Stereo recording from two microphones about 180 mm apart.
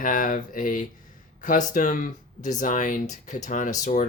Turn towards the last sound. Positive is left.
turn(degrees=40)  # may be behind; listen again after turning